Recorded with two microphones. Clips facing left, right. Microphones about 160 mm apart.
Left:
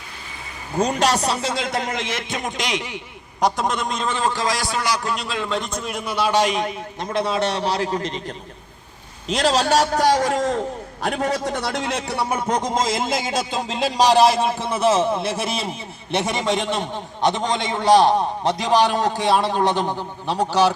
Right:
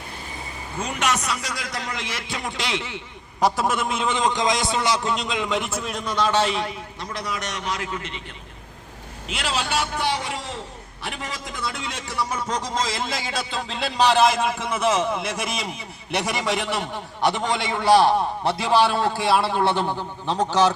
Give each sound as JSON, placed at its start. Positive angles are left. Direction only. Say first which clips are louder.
{"t": 0.8, "sound": "a man's voice", "louder": "left 6 dB", "side_deg": 35}
{"t": 3.4, "sound": "a man's voice", "louder": "even", "side_deg": -5}
{"t": 9.3, "sound": "a man's voice", "louder": "left 8 dB", "side_deg": 40}
{"t": 11.5, "sound": "a man's voice", "louder": "left 7 dB", "side_deg": 75}